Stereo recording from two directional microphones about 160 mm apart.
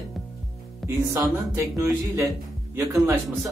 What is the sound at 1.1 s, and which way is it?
Speech, 20° right (ahead or behind).